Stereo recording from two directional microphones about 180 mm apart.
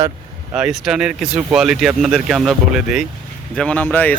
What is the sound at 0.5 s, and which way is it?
Speech, 5° right (ahead or behind).